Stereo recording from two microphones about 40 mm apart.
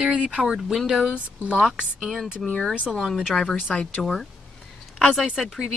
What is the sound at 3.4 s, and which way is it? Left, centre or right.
A woman's voice, left.